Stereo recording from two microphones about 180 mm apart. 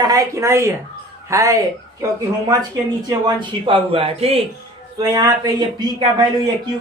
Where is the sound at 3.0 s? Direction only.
20° right (ahead or behind).